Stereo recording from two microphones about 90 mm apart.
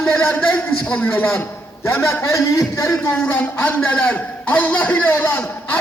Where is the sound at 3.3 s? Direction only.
20° left (ahead or behind).